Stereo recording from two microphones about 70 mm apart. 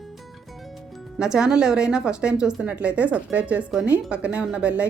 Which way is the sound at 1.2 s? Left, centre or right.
Centre.